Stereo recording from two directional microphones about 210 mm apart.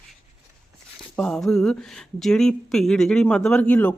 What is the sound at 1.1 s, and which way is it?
Speech, 5° left (ahead or behind).